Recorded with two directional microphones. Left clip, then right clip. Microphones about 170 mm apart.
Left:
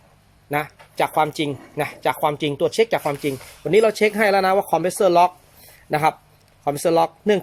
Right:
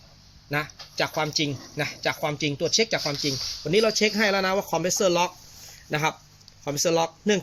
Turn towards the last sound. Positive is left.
turn(degrees=25)  # may be behind; listen again after turning